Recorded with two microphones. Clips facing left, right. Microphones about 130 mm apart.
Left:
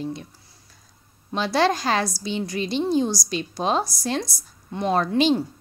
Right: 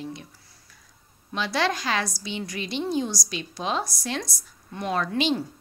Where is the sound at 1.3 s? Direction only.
35° left (ahead or behind).